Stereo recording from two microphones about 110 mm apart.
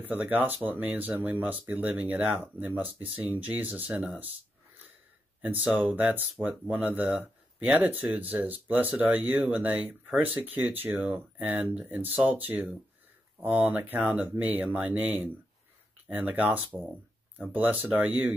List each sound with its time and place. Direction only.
0.0 s speech: 15° right (ahead or behind)
5.4 s speech: 15° right (ahead or behind)